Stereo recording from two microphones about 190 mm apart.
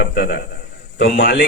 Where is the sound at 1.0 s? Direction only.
50° left (ahead or behind).